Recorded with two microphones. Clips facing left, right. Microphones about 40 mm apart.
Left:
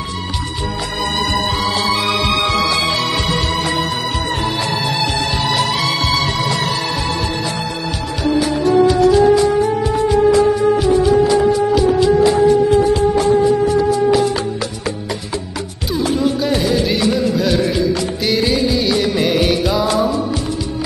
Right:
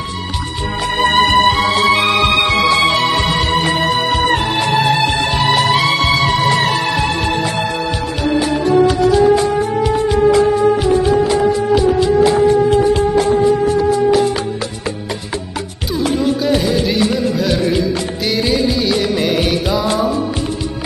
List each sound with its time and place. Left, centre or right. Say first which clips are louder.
0.9 s music: right 8 dB; right
16.2 s music: right 3 dB; centre